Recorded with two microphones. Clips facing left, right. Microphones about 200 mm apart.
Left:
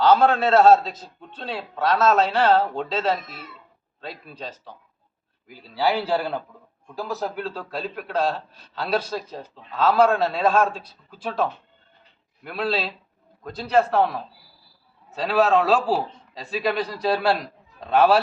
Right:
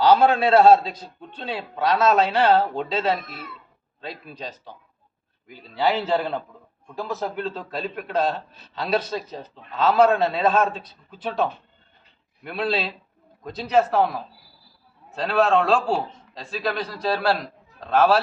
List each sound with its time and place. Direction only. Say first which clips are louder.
0.2 s speech: right 1 dB; 10° right (ahead or behind)
3.2 s speech: right 2 dB; 55° right (ahead or behind)
4.0 s a man's voice: right 1 dB; centre (ahead or behind)